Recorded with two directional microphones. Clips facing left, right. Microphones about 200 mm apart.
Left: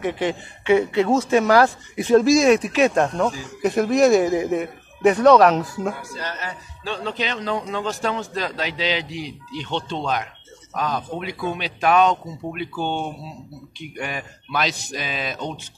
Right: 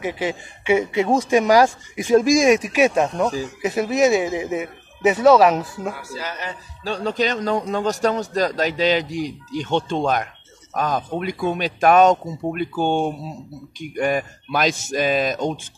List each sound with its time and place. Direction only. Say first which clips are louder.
0.0 s a man's voice: left 1 dB; 10° right (ahead or behind)
6.8 s a man's voice: right 5 dB; 40° right (ahead or behind)